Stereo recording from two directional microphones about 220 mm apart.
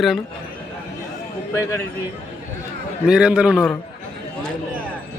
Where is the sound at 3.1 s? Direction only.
5° right (ahead or behind).